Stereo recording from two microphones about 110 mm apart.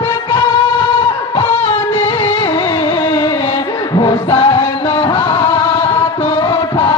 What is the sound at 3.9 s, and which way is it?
Music, 50° left (ahead or behind).